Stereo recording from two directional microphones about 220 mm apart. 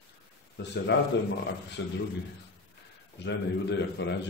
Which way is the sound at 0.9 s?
55° left (ahead or behind).